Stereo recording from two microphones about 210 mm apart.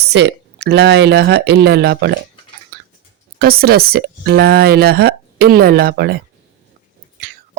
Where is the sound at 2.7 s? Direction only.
45° right (ahead or behind).